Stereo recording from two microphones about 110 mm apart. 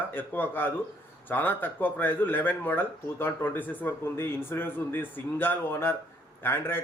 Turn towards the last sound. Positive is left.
turn(degrees=20)  # may be behind; listen again after turning